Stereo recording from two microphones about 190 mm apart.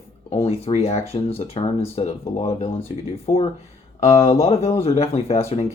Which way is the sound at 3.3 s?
15° left (ahead or behind).